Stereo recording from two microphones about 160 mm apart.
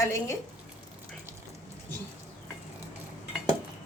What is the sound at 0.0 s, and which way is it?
Speech, 20° left (ahead or behind).